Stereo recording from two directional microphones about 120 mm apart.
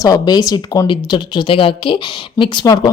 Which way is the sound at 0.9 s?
40° left (ahead or behind).